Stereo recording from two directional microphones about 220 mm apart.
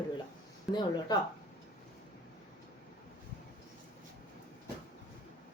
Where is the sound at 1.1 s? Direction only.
20° left (ahead or behind).